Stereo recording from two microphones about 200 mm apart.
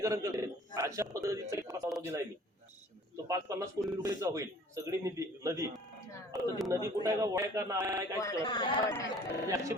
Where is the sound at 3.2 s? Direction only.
15° right (ahead or behind).